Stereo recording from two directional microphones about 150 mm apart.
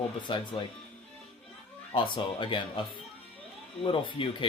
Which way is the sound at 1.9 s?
35° left (ahead or behind).